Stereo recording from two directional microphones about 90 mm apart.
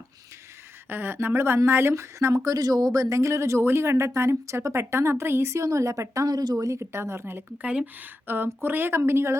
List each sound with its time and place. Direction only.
0.9 s speech: 25° right (ahead or behind)
7.6 s a woman's voice: 15° right (ahead or behind)